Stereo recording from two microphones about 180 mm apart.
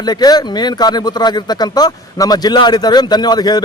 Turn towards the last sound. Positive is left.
turn(degrees=20)  # may be behind; listen again after turning